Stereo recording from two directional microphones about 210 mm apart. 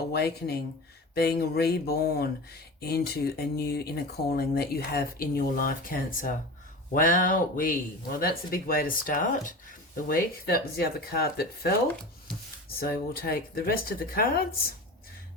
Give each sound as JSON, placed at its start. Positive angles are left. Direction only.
{"t": 0.1, "sound": "speech", "side_deg": 50}
{"t": 12.8, "sound": "speech", "side_deg": 45}